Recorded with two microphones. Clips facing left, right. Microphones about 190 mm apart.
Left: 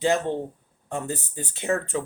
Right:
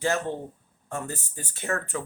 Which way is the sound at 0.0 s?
20° left (ahead or behind).